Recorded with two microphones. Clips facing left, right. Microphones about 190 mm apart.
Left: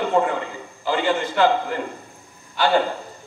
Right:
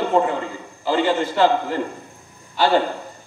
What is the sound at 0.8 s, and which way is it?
Speech, 35° right (ahead or behind).